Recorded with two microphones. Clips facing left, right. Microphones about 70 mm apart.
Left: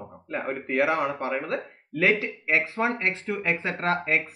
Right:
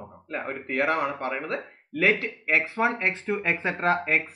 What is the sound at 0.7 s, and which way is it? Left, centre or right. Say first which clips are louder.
Speech: left 1 dB; centre.